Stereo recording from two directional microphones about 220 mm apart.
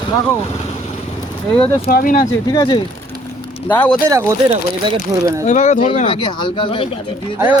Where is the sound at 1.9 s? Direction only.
40° left (ahead or behind).